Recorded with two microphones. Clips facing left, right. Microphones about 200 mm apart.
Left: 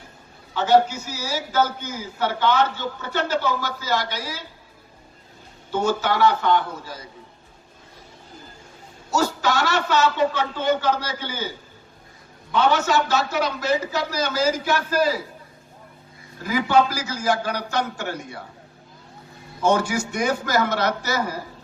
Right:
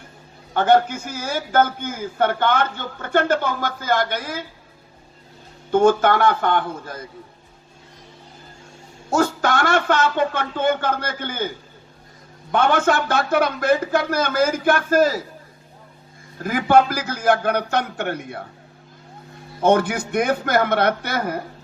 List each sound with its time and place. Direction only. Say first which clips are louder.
0.5 s a man's voice: right 1 dB; 55° right (ahead or behind)
5.7 s a man's voice: right 7 dB; 55° right (ahead or behind)
9.0 s a man's voice: right 3 dB; 55° right (ahead or behind)
16.4 s a man's voice: right 3 dB; 50° right (ahead or behind)
19.5 s a man's voice: right 3 dB; 55° right (ahead or behind)